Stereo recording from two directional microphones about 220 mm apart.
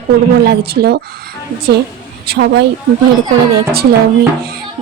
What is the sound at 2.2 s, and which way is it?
Speech, 50° right (ahead or behind).